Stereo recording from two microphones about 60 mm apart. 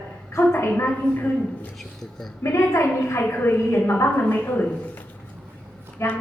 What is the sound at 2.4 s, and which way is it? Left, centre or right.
A woman's voice, left.